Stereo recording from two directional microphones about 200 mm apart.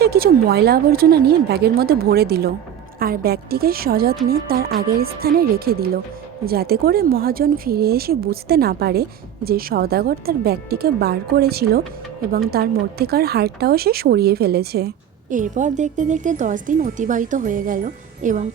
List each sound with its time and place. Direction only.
0.0 s a woman's voice: 50° right (ahead or behind)